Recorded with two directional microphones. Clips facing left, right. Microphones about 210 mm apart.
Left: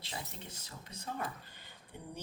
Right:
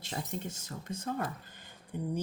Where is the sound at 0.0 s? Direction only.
45° right (ahead or behind).